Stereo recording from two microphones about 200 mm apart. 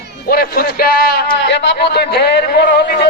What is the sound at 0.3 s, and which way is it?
A man's voice, 50° left (ahead or behind).